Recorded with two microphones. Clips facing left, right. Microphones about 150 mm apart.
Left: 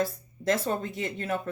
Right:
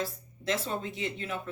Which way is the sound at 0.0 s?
45° left (ahead or behind).